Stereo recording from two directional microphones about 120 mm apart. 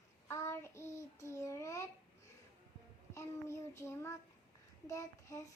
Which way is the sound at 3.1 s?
25° left (ahead or behind).